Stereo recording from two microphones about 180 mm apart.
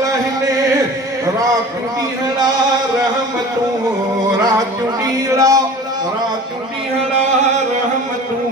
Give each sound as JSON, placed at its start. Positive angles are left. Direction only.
{"t": 4.5, "sound": "speech", "side_deg": -20}